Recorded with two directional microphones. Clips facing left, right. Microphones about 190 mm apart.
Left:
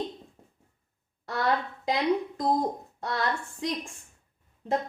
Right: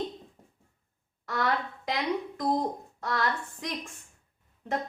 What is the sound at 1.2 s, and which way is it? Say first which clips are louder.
Speech: left 2 dB; 25° left (ahead or behind).